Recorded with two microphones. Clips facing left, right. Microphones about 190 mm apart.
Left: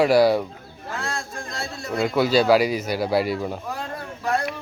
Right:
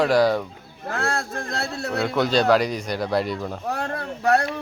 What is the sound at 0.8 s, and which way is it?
A man's voice, 65° right (ahead or behind).